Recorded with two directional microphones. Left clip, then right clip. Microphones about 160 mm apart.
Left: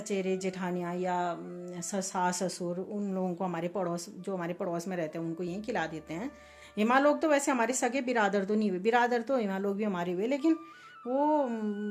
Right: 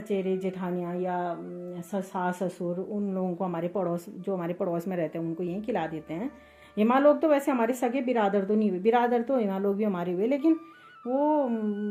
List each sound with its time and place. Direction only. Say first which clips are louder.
0.1 s a woman's voice: right 3 dB; 10° left (ahead or behind)